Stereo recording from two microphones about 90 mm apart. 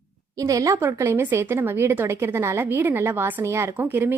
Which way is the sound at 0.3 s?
40° right (ahead or behind).